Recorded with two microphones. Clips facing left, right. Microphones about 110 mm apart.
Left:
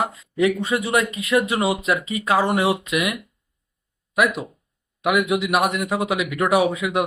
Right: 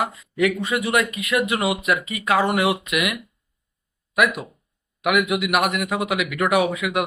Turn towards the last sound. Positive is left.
turn(degrees=30)  # may be behind; listen again after turning